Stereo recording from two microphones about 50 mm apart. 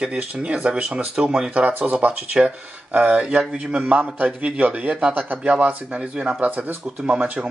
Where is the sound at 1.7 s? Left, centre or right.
Right.